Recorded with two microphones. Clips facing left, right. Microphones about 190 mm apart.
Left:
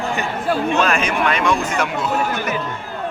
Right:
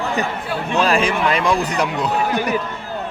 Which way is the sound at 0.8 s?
30° right (ahead or behind).